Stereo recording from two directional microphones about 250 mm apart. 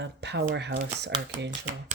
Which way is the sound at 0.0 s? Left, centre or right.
Right.